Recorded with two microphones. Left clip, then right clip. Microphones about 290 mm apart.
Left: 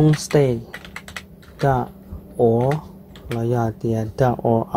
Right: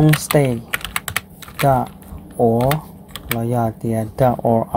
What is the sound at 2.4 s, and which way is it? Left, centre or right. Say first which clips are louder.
Speech: right 2 dB; centre.